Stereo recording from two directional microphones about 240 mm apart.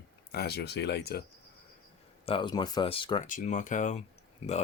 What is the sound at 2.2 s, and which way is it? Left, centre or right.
Speech, centre.